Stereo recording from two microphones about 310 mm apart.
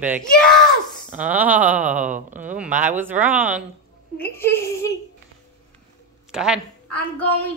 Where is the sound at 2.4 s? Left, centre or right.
Centre.